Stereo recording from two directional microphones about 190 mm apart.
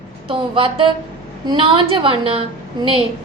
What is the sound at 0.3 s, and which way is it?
A woman's voice, 30° right (ahead or behind).